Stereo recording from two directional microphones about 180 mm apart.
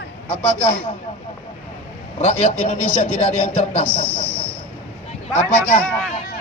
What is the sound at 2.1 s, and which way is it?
A man's voice, 35° left (ahead or behind).